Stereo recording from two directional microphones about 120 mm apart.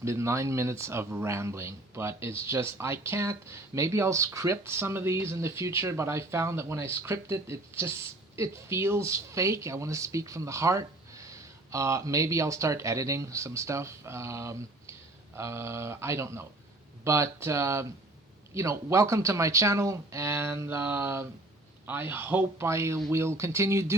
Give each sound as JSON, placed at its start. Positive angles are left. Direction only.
{"t": 0.0, "sound": "speech", "side_deg": -25}